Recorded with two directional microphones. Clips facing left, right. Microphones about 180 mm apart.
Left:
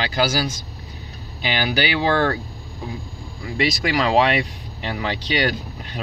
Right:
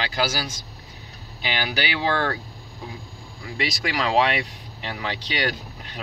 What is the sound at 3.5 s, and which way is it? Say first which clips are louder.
Speech: left 6 dB; 60° left (ahead or behind).